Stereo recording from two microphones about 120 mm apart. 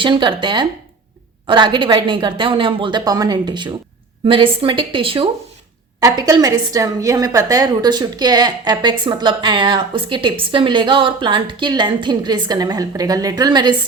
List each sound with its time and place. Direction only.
0.0 s a woman's voice: 40° right (ahead or behind)
6.0 s a woman's voice: 30° right (ahead or behind)